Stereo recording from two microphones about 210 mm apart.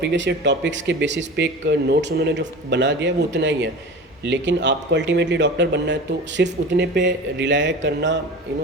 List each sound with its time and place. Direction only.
0.0 s speech: 55° right (ahead or behind)